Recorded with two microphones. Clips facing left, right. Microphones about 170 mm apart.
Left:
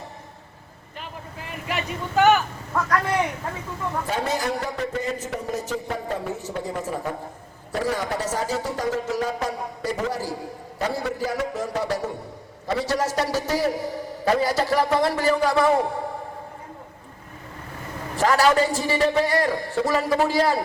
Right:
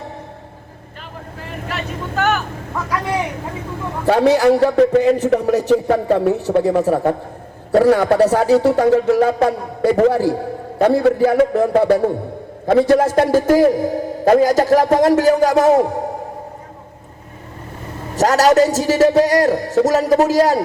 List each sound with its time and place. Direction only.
1.7 s vehicle: 10° left (ahead or behind)
4.0 s a man's voice: 70° right (ahead or behind); by 15.7 s 45° right (ahead or behind)
15.8 s a sound: 45° right (ahead or behind)
18.2 s a man's voice: 40° right (ahead or behind)